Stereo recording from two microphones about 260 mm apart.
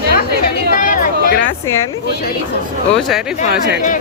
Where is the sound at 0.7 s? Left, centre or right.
Left.